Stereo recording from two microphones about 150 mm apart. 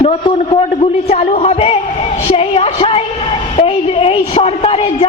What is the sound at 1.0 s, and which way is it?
Speech, 45° left (ahead or behind).